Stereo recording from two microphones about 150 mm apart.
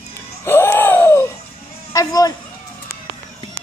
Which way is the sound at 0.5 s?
15° left (ahead or behind).